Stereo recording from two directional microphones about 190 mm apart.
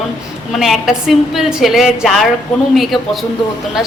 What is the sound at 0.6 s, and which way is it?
A woman's voice, centre (ahead or behind).